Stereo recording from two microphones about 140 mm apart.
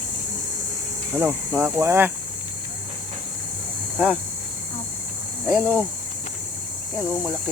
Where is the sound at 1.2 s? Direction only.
15° right (ahead or behind).